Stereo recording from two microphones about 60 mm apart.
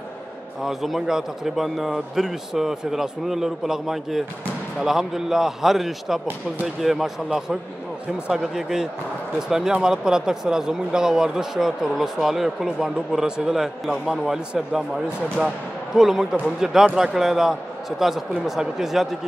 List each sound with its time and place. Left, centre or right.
0.6 s speech: centre